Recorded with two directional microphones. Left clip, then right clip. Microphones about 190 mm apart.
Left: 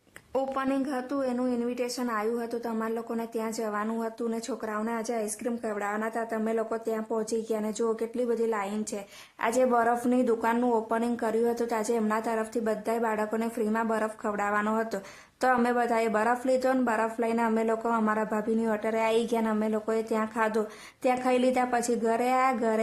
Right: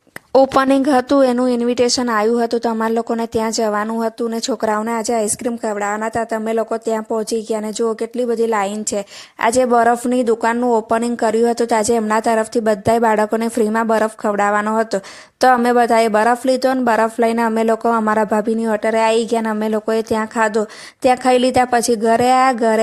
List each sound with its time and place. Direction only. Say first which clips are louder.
0.3 s speech: right 16 dB; 45° right (ahead or behind)